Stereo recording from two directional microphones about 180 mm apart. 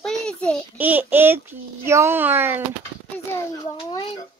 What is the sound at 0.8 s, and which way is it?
Speech, 10° right (ahead or behind).